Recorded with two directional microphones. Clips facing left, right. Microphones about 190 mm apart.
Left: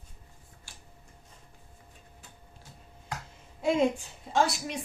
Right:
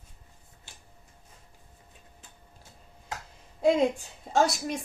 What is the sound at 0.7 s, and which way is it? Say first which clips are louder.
Tick-tock: even; 20° right (ahead or behind).